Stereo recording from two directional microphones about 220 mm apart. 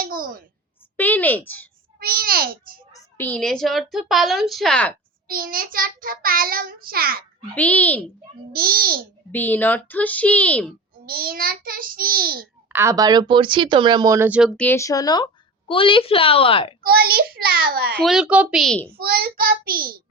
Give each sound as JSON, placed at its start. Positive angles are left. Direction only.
{"t": 0.0, "sound": "a sound", "side_deg": -40}
{"t": 0.9, "sound": "a woman's voice", "side_deg": 10}
{"t": 2.0, "sound": "child singing", "side_deg": -40}
{"t": 2.9, "sound": "speech", "side_deg": 10}
{"t": 5.3, "sound": "child singing", "side_deg": -40}
{"t": 7.5, "sound": "a child's voice", "side_deg": 5}
{"t": 8.5, "sound": "a child's voice", "side_deg": -40}
{"t": 9.3, "sound": "a child's voice", "side_deg": 10}
{"t": 11.0, "sound": "child singing", "side_deg": -40}
{"t": 12.6, "sound": "speech", "side_deg": -10}
{"t": 16.8, "sound": "a child's voice", "side_deg": -45}
{"t": 18.0, "sound": "speech", "side_deg": -5}
{"t": 18.9, "sound": "child singing", "side_deg": -45}